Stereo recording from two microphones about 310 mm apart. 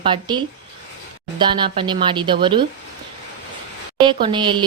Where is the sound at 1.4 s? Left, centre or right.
Centre.